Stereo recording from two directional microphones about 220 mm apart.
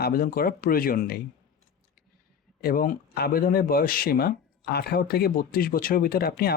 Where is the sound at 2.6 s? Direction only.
40° left (ahead or behind).